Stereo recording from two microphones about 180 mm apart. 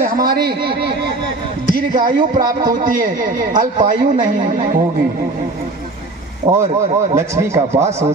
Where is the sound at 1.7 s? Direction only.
50° right (ahead or behind).